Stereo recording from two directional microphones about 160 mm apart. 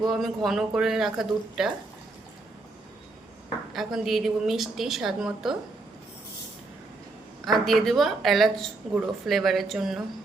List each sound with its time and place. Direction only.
0.1 s speech: centre (ahead or behind)
3.7 s speech: centre (ahead or behind)
7.4 s speech: centre (ahead or behind)